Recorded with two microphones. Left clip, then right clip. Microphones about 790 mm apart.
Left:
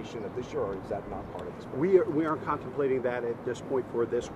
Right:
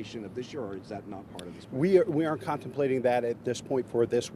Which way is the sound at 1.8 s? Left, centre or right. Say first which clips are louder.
Right 1 dB; centre.